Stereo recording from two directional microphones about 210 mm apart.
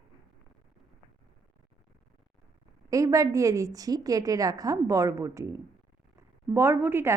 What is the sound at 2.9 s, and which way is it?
A woman's voice, 15° right (ahead or behind).